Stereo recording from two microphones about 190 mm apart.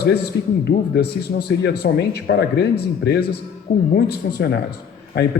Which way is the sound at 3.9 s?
60° left (ahead or behind).